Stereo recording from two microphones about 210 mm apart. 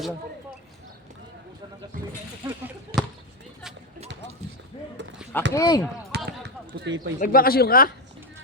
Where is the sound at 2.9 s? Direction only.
50° right (ahead or behind).